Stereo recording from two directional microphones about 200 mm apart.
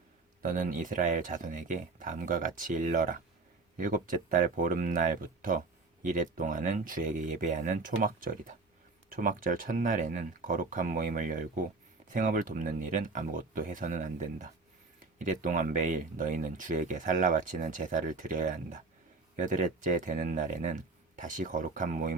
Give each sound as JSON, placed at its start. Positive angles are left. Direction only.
{"t": 0.4, "sound": "speech", "side_deg": -40}